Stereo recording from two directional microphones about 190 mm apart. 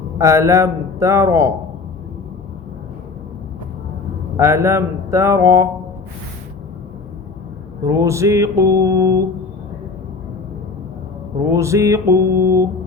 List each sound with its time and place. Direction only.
0.2 s a man's voice: 15° right (ahead or behind)
4.4 s a man's voice: 15° right (ahead or behind)
7.9 s a man's voice: 15° right (ahead or behind)
11.5 s a man's voice: 15° right (ahead or behind)